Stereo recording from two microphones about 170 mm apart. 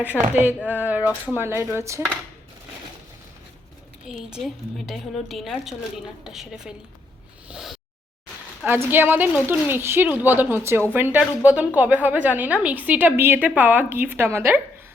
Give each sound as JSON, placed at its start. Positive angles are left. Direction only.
{"t": 0.0, "sound": "a woman's voice", "side_deg": -10}
{"t": 4.3, "sound": "a woman's voice", "side_deg": 0}
{"t": 7.4, "sound": "a sound", "side_deg": -5}
{"t": 8.6, "sound": "a woman's voice", "side_deg": -10}